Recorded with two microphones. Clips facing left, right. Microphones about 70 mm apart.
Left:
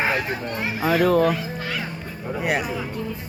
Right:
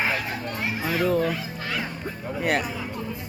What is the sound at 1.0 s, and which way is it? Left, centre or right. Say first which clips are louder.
Speech: left 5 dB; left.